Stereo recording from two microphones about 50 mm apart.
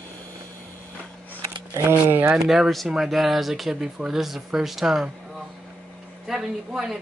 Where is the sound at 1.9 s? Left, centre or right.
Right.